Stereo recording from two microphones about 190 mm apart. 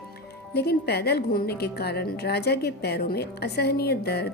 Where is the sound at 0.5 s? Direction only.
60° left (ahead or behind).